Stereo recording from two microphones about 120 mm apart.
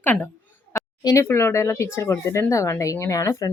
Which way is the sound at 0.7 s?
30° left (ahead or behind).